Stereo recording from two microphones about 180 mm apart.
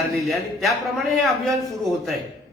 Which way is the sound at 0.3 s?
Centre (ahead or behind).